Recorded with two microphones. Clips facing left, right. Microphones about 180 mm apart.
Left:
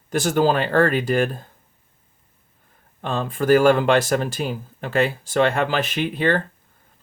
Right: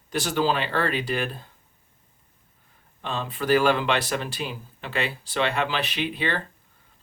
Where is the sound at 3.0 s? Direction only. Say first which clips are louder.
Left 6 dB; 45° left (ahead or behind).